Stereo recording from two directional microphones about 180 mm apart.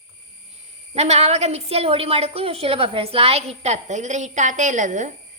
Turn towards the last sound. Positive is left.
turn(degrees=-45)  # may be behind; listen again after turning